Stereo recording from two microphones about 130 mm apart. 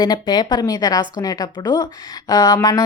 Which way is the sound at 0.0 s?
30° left (ahead or behind).